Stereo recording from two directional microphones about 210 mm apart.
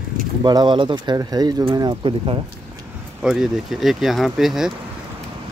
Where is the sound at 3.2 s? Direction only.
5° right (ahead or behind).